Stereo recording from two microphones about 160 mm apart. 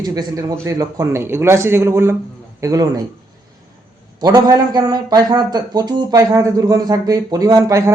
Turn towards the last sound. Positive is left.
turn(degrees=-20)  # may be behind; listen again after turning